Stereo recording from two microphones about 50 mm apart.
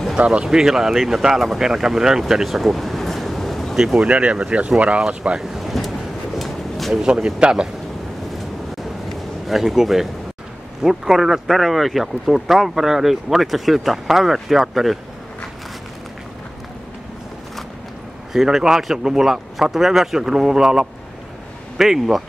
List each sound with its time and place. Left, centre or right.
0.2 s speech: right
0.6 s speech: centre
3.7 s speech: centre
4.1 s speech: right
5.4 s a sound: centre
7.2 s speech: centre
9.1 s a sound: centre
10.8 s speech: centre
18.3 s speech: centre